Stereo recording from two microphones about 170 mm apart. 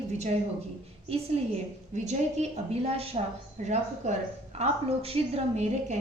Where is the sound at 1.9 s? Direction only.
40° right (ahead or behind).